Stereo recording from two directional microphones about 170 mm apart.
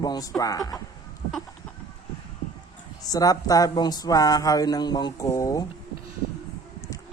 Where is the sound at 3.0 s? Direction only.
20° left (ahead or behind).